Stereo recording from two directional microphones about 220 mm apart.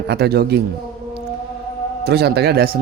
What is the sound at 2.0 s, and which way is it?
Speech, 45° right (ahead or behind).